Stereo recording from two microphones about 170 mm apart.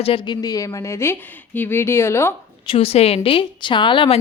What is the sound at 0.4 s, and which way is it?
Speech, 20° left (ahead or behind).